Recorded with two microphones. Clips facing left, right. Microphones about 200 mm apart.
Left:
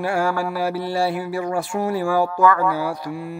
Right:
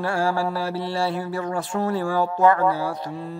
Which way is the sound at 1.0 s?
10° left (ahead or behind).